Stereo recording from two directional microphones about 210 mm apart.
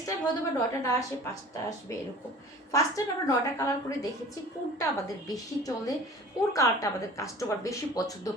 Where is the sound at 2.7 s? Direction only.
15° left (ahead or behind).